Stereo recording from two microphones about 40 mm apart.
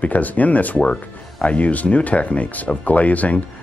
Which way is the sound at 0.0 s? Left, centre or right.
Left.